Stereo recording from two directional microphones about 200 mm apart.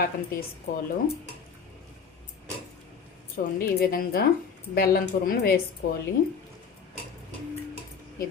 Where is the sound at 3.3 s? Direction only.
50° left (ahead or behind).